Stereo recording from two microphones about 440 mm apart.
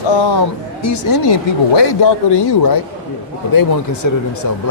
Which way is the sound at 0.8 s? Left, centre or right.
Left.